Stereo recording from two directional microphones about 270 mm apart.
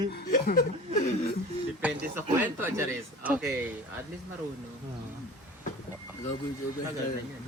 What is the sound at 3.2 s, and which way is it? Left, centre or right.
Speech, centre.